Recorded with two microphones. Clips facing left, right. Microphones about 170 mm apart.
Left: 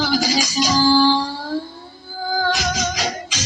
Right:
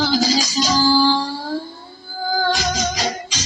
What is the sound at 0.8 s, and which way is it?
Child singing, centre (ahead or behind).